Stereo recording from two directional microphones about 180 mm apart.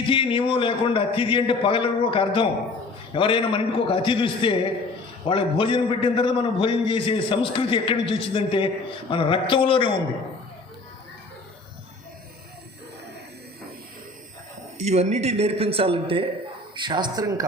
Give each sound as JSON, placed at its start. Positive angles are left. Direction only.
{"t": 0.0, "sound": "a man's voice", "side_deg": 30}
{"t": 14.8, "sound": "speech", "side_deg": -35}